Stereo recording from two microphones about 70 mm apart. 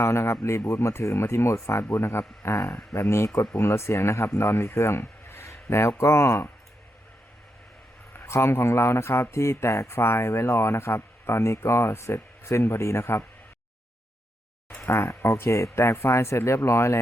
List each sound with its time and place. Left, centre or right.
0.0 s speech: left
8.1 s speech: left
14.8 s speech: left